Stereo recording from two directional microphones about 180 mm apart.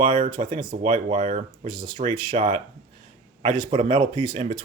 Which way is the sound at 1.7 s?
25° right (ahead or behind).